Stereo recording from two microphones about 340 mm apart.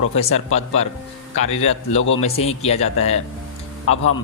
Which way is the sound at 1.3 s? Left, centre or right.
Centre.